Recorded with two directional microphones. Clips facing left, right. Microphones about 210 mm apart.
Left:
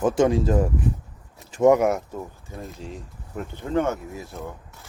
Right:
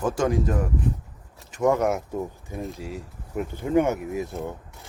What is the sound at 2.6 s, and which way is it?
Speech, 5° right (ahead or behind).